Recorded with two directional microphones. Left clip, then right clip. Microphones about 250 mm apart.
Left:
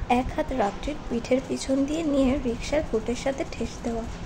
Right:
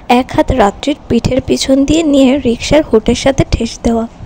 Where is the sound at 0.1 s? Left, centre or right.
Right.